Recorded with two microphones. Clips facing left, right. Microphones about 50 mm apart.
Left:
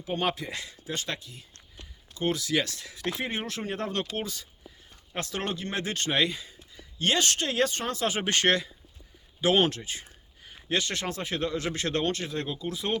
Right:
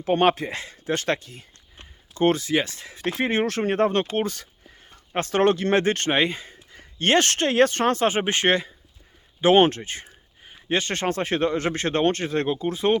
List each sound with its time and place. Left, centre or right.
0.0 s speech: right
0.9 s speech: right
2.3 s speech: right
3.2 s speech: right
4.9 s a sound: right
5.5 s speech: right
5.8 s speech: right
8.0 s speech: right
8.3 s speech: right
9.4 s speech: right